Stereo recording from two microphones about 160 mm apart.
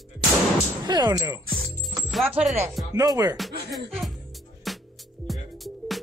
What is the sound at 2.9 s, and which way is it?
Music, 20° right (ahead or behind).